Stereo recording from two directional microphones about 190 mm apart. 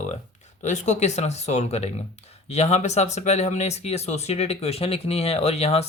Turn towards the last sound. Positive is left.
turn(degrees=35)  # may be behind; listen again after turning